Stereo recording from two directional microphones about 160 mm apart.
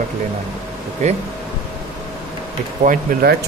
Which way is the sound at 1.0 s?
45° right (ahead or behind).